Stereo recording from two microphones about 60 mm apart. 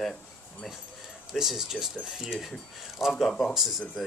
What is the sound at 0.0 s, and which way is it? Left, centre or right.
Keys jangling, centre.